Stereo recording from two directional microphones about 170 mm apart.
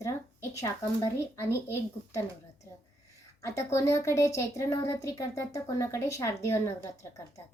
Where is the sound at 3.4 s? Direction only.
15° left (ahead or behind).